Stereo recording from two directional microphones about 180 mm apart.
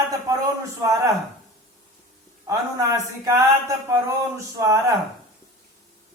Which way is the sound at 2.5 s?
15° right (ahead or behind).